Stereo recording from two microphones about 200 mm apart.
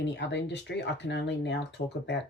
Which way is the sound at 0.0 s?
60° left (ahead or behind).